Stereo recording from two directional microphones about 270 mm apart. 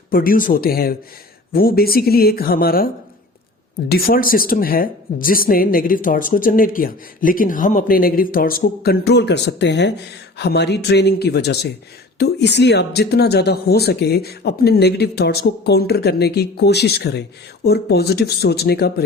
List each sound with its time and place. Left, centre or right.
0.1 s speech: left